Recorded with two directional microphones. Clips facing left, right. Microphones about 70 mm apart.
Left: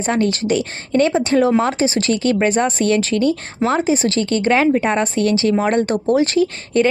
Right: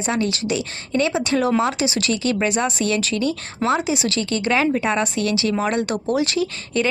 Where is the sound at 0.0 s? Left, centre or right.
Left.